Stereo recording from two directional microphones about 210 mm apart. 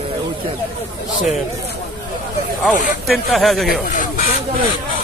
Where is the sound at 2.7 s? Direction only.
Centre (ahead or behind).